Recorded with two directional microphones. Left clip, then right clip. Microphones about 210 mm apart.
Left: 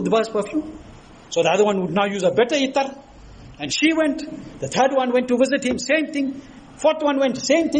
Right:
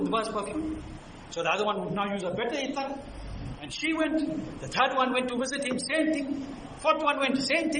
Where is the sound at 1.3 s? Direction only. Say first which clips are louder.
Left 10 dB; 25° left (ahead or behind).